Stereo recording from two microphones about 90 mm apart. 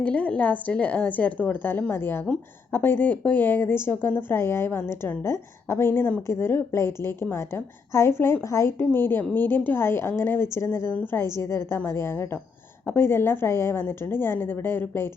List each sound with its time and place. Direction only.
0.0 s a woman's voice: 15° left (ahead or behind)